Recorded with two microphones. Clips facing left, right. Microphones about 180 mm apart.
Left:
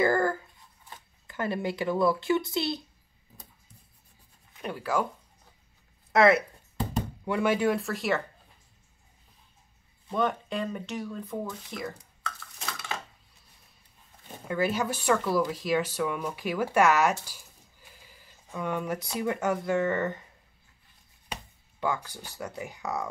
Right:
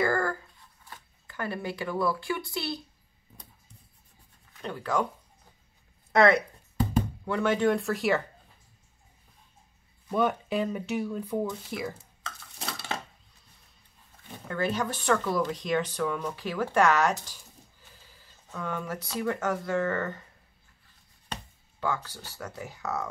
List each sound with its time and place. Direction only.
0.0 s a sound: 20° left (ahead or behind)
0.8 s speech: 20° left (ahead or behind)
4.6 s speech: 10° left (ahead or behind)
6.1 s a sound: centre (ahead or behind)
7.2 s speech: 10° left (ahead or behind)
10.1 s speech: 5° right (ahead or behind)
12.0 s dishes: 30° right (ahead or behind)
14.5 s speech: 10° left (ahead or behind)
21.3 s speech: 15° left (ahead or behind)